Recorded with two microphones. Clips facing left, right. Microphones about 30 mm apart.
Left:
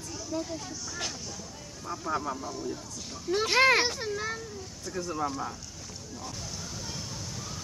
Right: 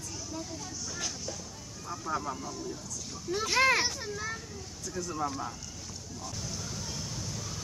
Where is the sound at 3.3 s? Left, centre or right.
Left.